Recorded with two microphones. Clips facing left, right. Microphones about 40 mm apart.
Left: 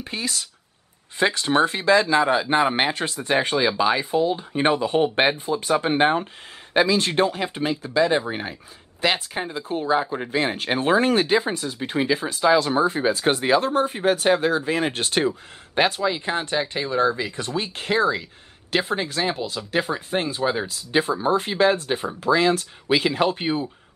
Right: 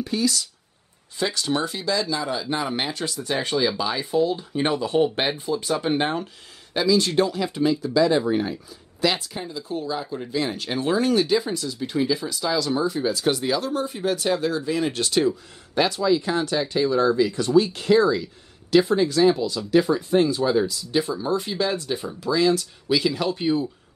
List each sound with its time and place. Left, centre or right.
0.0 s speech: left